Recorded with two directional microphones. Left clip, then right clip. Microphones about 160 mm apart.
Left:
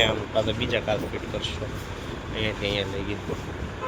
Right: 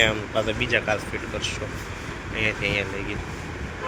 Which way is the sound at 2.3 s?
15° left (ahead or behind).